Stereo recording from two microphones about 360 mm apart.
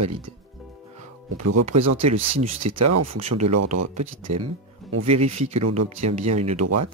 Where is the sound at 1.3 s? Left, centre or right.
Right.